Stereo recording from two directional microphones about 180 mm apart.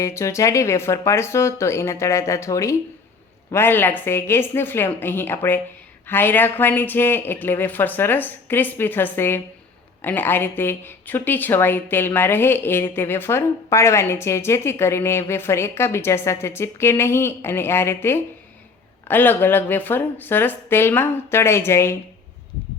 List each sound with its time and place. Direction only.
0.0 s speech: 15° left (ahead or behind)